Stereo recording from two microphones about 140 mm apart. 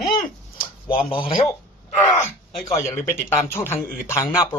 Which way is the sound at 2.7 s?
20° left (ahead or behind).